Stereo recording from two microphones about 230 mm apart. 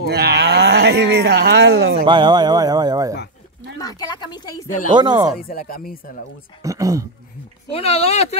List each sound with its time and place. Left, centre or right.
0.0 s speech: right
2.0 s speech: centre
3.7 s a sound: centre
4.9 s speech: centre
5.4 s speech: left
6.6 s speech: centre
7.7 s speech: left